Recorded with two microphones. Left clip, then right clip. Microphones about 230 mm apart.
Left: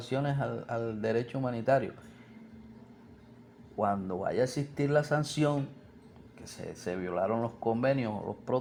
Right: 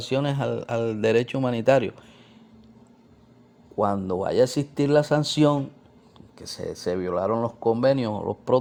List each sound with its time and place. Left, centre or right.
0.0 s speech: right
3.8 s speech: right
6.6 s speech: right